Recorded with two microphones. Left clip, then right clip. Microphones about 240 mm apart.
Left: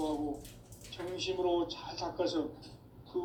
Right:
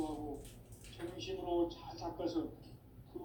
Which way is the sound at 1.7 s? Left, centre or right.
Left.